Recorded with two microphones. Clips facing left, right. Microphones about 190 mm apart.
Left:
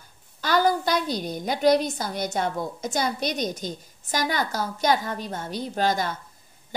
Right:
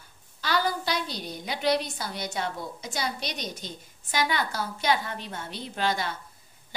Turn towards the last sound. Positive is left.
turn(degrees=45)  # may be behind; listen again after turning